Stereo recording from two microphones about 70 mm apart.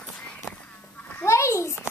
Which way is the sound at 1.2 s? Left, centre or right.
Left.